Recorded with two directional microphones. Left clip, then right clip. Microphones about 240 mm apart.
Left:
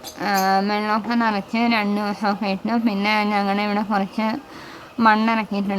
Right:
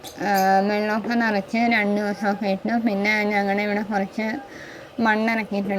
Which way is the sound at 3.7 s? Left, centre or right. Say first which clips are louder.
Left 2 dB; left.